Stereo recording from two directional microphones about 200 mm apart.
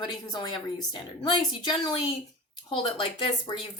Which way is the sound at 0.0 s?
20° left (ahead or behind).